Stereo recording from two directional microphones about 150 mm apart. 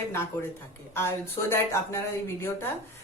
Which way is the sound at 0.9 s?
15° left (ahead or behind).